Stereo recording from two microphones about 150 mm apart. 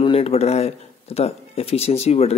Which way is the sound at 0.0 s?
40° left (ahead or behind).